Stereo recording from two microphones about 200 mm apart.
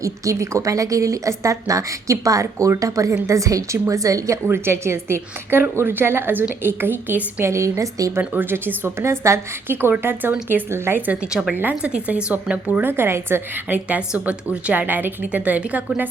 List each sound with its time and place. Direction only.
0.0 s a woman's voice: 15° right (ahead or behind)